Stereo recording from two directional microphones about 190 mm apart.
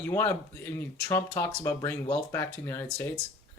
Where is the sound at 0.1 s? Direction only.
15° left (ahead or behind).